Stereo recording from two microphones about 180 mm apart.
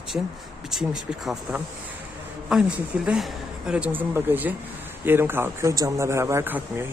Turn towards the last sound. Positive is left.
turn(degrees=-10)  # may be behind; listen again after turning